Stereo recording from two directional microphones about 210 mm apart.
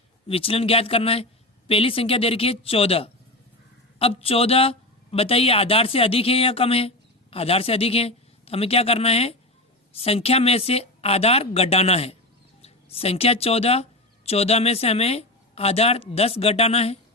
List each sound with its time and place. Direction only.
0.3 s a woman's voice: 25° left (ahead or behind)